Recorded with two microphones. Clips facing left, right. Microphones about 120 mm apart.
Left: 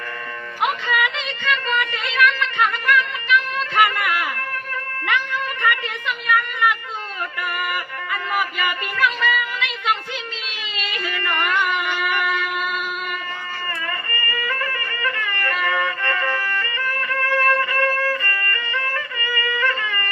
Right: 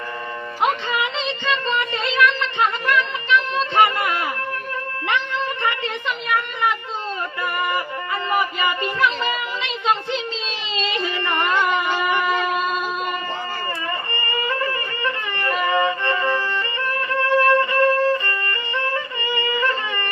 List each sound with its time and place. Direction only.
0.6 s a sound: 30° right (ahead or behind)
5.6 s a woman's voice: 25° right (ahead or behind)
7.6 s music: 25° right (ahead or behind)
10.8 s a sound: 25° right (ahead or behind)
14.1 s music: 25° right (ahead or behind)
15.6 s violin: 25° right (ahead or behind)